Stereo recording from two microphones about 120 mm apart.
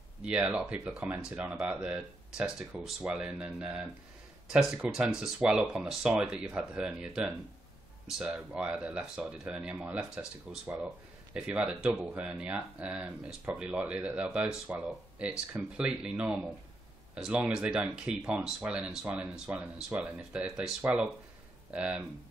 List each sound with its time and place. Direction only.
0.2 s speech: 10° right (ahead or behind)